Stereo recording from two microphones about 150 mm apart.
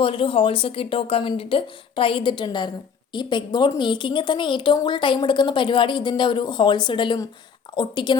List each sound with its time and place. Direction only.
0.0 s speech: 35° left (ahead or behind)